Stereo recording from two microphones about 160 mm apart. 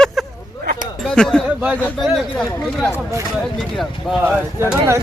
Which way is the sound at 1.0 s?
5° left (ahead or behind).